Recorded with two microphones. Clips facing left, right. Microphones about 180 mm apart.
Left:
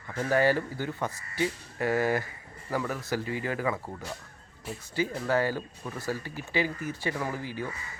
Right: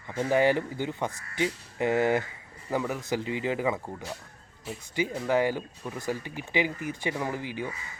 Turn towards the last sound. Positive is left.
turn(degrees=-15)  # may be behind; listen again after turning